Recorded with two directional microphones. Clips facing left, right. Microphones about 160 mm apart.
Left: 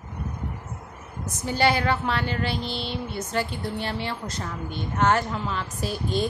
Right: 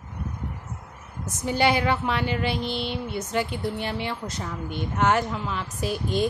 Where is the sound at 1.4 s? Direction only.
20° right (ahead or behind).